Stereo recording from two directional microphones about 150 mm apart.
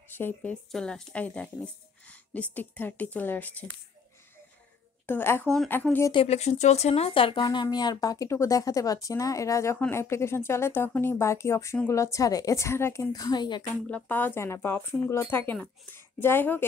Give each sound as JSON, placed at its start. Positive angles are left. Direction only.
{"t": 0.1, "sound": "speech", "side_deg": 10}
{"t": 5.0, "sound": "speech", "side_deg": 15}
{"t": 6.1, "sound": "speech", "side_deg": 45}
{"t": 13.8, "sound": "speech", "side_deg": 10}